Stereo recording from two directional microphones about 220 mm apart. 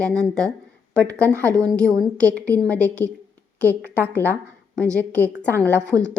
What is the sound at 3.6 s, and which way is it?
Speech, 10° right (ahead or behind).